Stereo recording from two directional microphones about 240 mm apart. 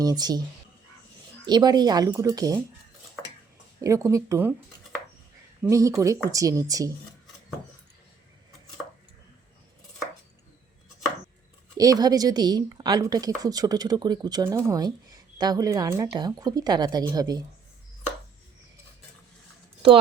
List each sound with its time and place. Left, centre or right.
0.0 s speech: centre
1.5 s speech: centre
3.8 s speech: centre
5.6 s speech: centre
11.8 s speech: centre